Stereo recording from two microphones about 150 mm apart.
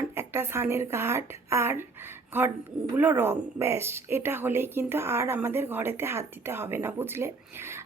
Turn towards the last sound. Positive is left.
turn(degrees=-15)  # may be behind; listen again after turning